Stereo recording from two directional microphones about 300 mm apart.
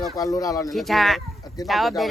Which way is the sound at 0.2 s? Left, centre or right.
Centre.